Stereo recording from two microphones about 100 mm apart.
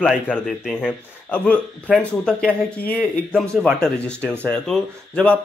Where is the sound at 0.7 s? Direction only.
15° left (ahead or behind).